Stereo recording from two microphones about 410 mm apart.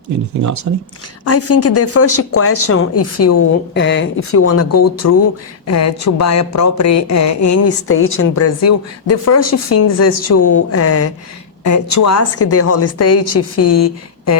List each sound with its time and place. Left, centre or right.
0.4 s speech: right
1.2 s speech: left
3.8 s speech: left